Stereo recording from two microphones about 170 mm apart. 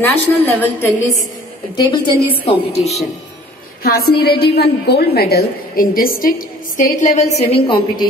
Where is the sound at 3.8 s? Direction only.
65° left (ahead or behind).